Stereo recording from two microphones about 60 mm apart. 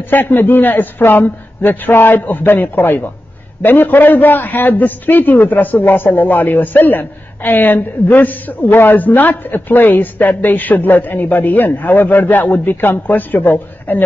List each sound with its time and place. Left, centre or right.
0.1 s a man's voice: left